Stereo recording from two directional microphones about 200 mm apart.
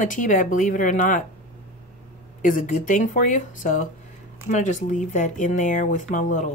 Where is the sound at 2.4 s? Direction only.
40° left (ahead or behind).